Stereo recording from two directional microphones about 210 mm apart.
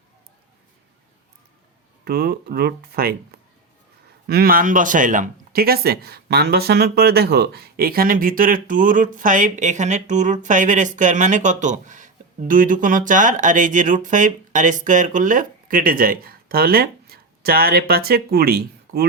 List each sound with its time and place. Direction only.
2.0 s speech: 45° right (ahead or behind)